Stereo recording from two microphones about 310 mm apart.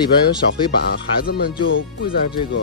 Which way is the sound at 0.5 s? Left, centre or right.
Left.